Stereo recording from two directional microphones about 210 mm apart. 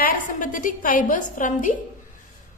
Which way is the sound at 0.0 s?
40° left (ahead or behind).